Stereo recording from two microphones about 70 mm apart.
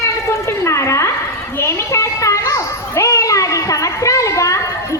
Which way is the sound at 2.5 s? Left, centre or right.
Left.